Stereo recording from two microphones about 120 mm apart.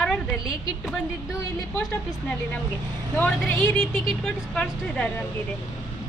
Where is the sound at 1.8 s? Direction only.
10° left (ahead or behind).